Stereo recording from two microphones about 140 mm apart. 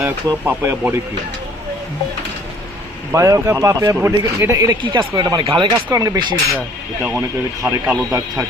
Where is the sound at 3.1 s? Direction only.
20° right (ahead or behind).